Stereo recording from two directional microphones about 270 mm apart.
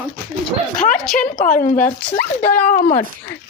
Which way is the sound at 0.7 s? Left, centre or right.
Left.